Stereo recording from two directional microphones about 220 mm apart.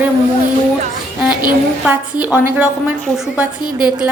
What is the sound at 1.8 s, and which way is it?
A woman's voice, 5° right (ahead or behind).